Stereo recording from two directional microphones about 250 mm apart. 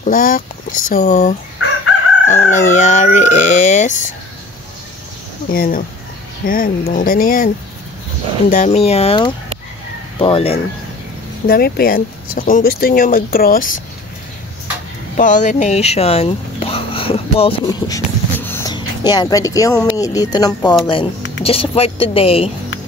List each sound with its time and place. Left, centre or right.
0.0 s speech: left
5.5 s speech: left
11.4 s speech: left
15.1 s speech: left